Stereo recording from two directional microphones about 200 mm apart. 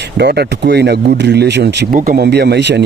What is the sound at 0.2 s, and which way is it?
Speech, 55° right (ahead or behind).